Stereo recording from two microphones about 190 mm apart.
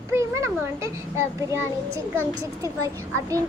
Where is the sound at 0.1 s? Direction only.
15° right (ahead or behind).